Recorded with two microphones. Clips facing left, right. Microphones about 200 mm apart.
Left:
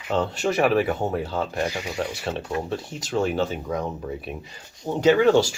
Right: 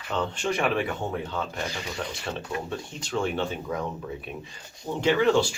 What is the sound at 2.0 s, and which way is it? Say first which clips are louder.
Speech: left 6 dB; 30° left (ahead or behind).